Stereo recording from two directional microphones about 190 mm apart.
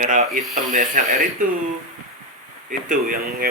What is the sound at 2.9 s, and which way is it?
Speech, 45° right (ahead or behind).